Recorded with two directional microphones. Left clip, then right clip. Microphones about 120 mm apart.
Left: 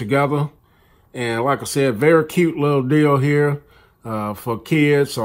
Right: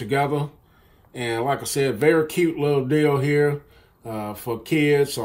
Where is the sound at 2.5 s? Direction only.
30° left (ahead or behind).